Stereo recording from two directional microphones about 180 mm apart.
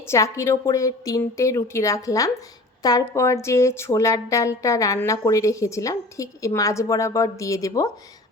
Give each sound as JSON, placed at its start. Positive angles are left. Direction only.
{"t": 0.1, "sound": "speech", "side_deg": 15}